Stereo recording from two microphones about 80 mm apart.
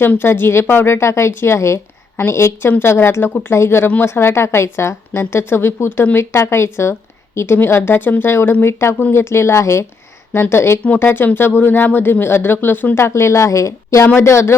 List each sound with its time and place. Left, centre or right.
0.0 s speech: left